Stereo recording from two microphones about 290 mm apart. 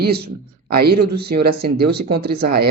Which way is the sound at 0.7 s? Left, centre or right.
Right.